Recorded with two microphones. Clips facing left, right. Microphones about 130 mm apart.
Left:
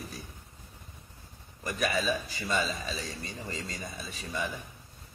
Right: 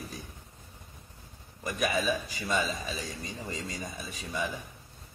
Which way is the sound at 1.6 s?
15° right (ahead or behind).